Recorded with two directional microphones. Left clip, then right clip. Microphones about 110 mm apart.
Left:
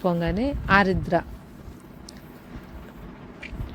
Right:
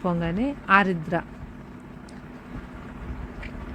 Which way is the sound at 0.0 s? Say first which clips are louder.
Left 2 dB; 55° left (ahead or behind).